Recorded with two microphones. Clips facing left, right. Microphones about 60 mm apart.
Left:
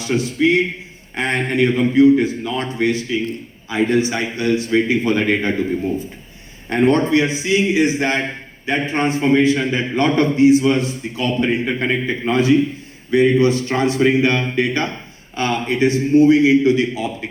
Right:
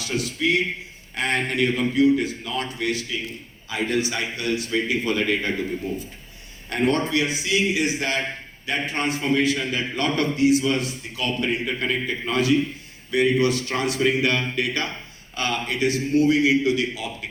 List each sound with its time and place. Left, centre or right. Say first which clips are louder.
0.0 s a man's voice: left 7 dB; left
6.7 s a man's voice: left 7 dB; left